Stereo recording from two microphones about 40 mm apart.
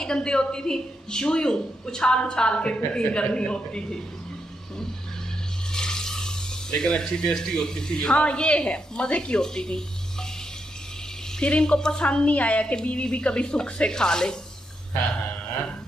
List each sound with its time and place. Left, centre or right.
0.0 s a woman's voice: left
5.7 s water: centre
7.0 s a woman's voice: centre
11.3 s a woman's voice: left